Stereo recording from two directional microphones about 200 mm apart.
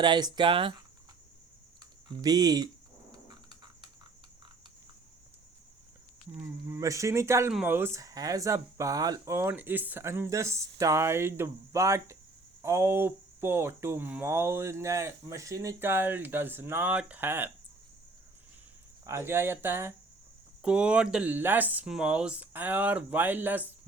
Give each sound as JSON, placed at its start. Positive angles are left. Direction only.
{"t": 0.0, "sound": "speech", "side_deg": -20}
{"t": 1.8, "sound": "speech", "side_deg": -20}
{"t": 3.2, "sound": "a sound", "side_deg": -20}
{"t": 6.3, "sound": "speech", "side_deg": -10}
{"t": 19.0, "sound": "speech", "side_deg": -10}